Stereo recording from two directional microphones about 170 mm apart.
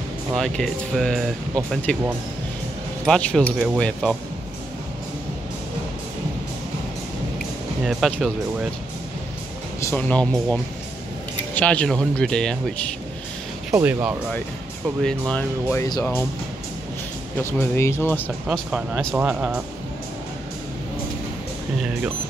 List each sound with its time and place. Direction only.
0.4 s speech: centre (ahead or behind)
3.1 s speech: 5° left (ahead or behind)
7.8 s speech: centre (ahead or behind)
9.8 s speech: 10° left (ahead or behind)
13.7 s speech: 10° right (ahead or behind)
15.0 s speech: 5° left (ahead or behind)
15.8 s speech: 15° left (ahead or behind)
17.4 s speech: 15° left (ahead or behind)
18.5 s speech: 5° right (ahead or behind)